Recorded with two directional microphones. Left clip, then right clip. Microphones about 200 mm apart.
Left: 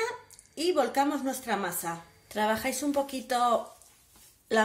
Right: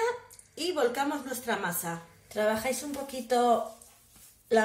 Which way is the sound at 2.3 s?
55° left (ahead or behind).